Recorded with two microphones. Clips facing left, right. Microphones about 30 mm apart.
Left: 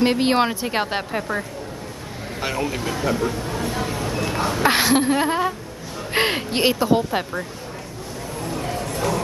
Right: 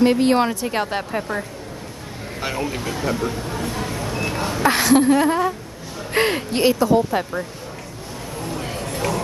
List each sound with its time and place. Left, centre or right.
0.0 s a woman's voice: left
1.3 s speech: right
2.4 s speech: centre
4.6 s a woman's voice: centre
8.4 s a sound: centre